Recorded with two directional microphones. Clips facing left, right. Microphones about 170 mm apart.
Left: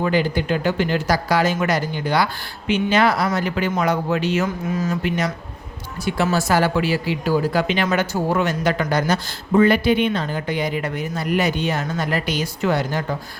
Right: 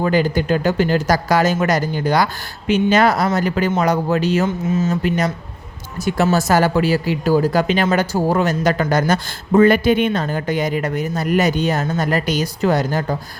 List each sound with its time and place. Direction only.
0.0 s speech: 40° right (ahead or behind)
4.4 s speech: 25° right (ahead or behind)
5.0 s speech: 40° right (ahead or behind)